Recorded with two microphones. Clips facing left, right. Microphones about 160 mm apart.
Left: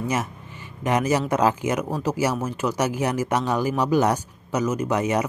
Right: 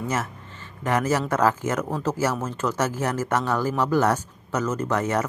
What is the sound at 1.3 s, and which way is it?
Speech, 15° left (ahead or behind).